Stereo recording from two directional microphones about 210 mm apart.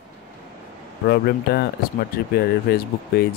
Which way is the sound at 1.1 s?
50° left (ahead or behind).